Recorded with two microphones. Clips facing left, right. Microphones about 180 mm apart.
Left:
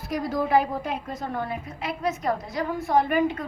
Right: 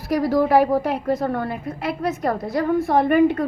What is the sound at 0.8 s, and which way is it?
A woman's voice, 70° right (ahead or behind).